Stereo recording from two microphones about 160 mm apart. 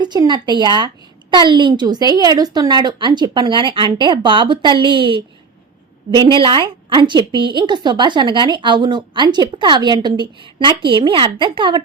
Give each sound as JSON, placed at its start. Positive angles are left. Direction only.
{"t": 0.0, "sound": "a woman's voice", "side_deg": -25}